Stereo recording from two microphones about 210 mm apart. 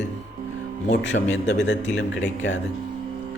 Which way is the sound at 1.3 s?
60° left (ahead or behind).